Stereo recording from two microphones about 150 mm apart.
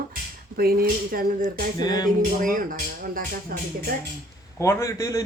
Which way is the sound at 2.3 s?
65° right (ahead or behind).